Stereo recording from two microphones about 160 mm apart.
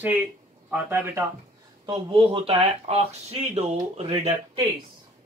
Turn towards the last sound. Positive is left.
turn(degrees=-35)  # may be behind; listen again after turning